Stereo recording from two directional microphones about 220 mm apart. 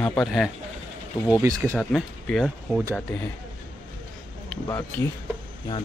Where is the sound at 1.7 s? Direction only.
5° left (ahead or behind).